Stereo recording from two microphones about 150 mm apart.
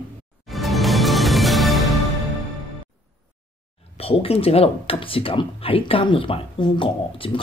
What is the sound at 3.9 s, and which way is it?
Speech, 40° left (ahead or behind).